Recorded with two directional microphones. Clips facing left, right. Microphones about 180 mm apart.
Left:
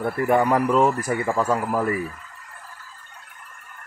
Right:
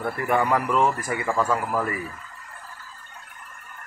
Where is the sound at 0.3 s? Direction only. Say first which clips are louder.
Left 3 dB; 20° left (ahead or behind).